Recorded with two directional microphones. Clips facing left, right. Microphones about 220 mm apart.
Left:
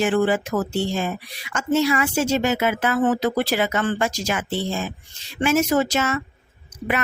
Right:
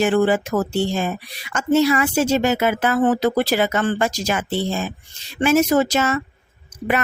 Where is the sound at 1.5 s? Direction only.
40° right (ahead or behind).